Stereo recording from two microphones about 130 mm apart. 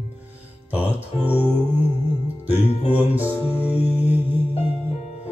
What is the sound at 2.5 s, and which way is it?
Music, 55° left (ahead or behind).